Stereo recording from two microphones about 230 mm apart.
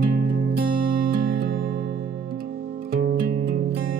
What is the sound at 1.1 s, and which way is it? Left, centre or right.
Music, right.